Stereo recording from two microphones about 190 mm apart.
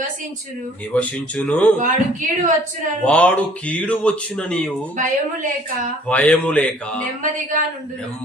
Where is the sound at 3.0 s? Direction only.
5° left (ahead or behind).